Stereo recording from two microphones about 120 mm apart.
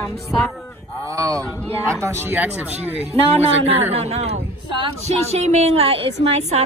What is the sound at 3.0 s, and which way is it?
A woman's voice, 60° right (ahead or behind).